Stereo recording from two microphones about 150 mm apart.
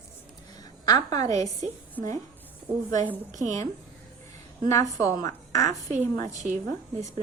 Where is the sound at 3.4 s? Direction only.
20° left (ahead or behind).